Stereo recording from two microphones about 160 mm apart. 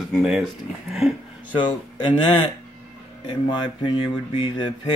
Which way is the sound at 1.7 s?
35° left (ahead or behind).